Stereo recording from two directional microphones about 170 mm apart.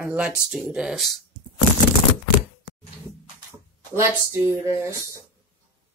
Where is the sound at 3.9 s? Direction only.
15° right (ahead or behind).